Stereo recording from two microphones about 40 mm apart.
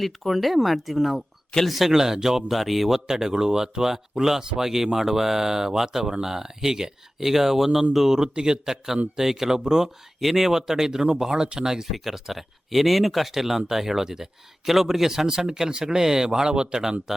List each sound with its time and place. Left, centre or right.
0.0 s speech: centre
1.9 s speech: centre
2.5 s speech: centre
10.2 s speech: centre
11.9 s speech: centre